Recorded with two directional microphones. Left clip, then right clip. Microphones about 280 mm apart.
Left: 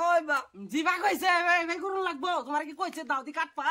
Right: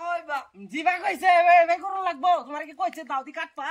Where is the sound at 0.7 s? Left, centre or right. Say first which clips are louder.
Right 2 dB; centre.